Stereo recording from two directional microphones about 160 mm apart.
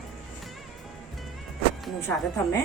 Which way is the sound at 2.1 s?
5° left (ahead or behind).